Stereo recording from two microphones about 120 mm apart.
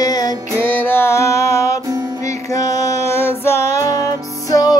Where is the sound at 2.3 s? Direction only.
25° left (ahead or behind).